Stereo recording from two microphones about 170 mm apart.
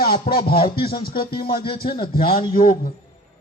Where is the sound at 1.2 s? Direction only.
30° left (ahead or behind).